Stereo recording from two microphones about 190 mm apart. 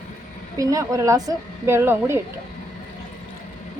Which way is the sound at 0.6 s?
15° right (ahead or behind).